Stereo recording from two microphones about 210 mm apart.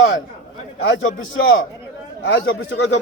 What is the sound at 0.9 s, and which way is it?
A man's voice, 65° left (ahead or behind).